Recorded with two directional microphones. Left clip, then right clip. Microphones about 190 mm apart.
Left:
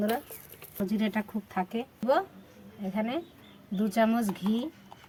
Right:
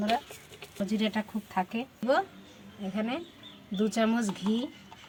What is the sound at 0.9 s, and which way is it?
Speech, 20° left (ahead or behind).